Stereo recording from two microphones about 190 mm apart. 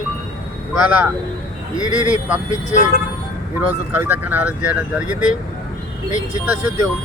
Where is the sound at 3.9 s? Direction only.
10° right (ahead or behind).